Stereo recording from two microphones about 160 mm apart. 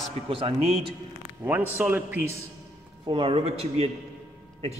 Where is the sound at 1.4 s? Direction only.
10° right (ahead or behind).